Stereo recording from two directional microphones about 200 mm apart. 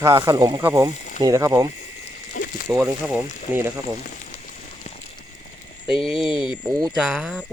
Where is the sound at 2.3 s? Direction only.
40° left (ahead or behind).